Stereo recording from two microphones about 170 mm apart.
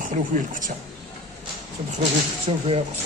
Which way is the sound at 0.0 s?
50° right (ahead or behind).